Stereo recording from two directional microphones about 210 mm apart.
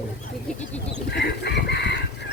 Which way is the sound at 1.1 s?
55° left (ahead or behind).